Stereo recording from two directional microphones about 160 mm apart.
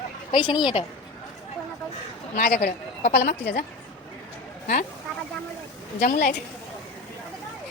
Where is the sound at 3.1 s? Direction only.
90° left.